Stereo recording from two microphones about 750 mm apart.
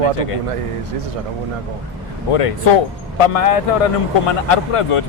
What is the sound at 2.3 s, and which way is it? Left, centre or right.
Speech, left.